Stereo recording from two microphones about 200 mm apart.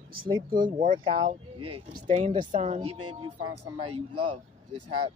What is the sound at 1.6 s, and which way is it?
Speech, 90° right.